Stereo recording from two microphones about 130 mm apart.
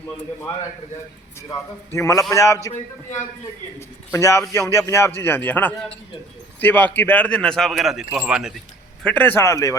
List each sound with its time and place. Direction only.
1.4 s a man's voice: 20° left (ahead or behind)
3.8 s a man's voice: 20° left (ahead or behind); by 8.6 s 5° right (ahead or behind)
9.0 s a man's voice: 15° left (ahead or behind)